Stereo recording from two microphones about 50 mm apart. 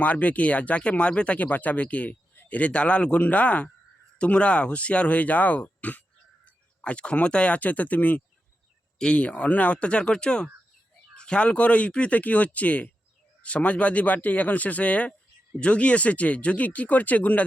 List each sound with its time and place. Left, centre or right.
0.0 s speech: left
1.4 s speech: left
2.3 s a sound: left
2.6 s speech: left